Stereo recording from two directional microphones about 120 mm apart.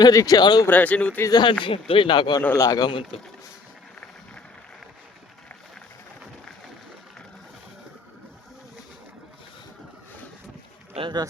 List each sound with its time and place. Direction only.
0.0 s speech: 30° left (ahead or behind)
0.7 s speech: 15° left (ahead or behind)
1.3 s speech: 35° left (ahead or behind)
10.9 s speech: 45° right (ahead or behind)